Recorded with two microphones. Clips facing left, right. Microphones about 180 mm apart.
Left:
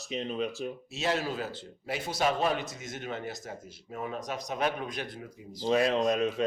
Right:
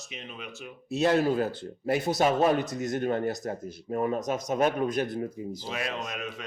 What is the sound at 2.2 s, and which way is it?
Speech, 40° right (ahead or behind).